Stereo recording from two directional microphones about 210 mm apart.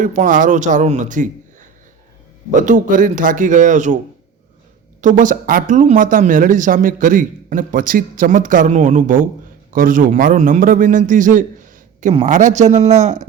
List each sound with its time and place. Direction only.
0.0 s speech: 40° right (ahead or behind)
2.6 s speech: 40° right (ahead or behind)
4.9 s speech: 35° right (ahead or behind)